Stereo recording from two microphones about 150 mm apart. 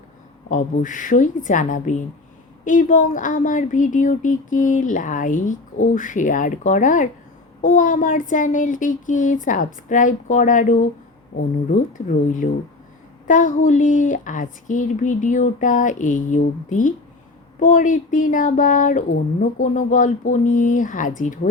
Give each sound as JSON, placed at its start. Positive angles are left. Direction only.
{"t": 0.5, "sound": "speech", "side_deg": 60}